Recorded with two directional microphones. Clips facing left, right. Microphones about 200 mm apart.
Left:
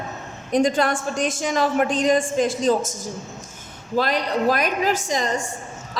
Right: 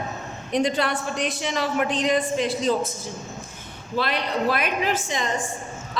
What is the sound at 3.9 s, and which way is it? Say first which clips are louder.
A woman's voice: left 3 dB; 40° left (ahead or behind).